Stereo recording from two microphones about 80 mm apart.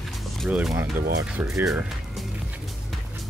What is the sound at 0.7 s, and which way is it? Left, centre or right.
Speech, right.